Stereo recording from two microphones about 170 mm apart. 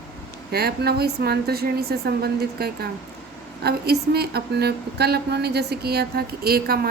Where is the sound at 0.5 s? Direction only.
65° right (ahead or behind).